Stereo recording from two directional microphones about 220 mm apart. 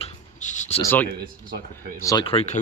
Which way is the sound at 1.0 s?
40° right (ahead or behind).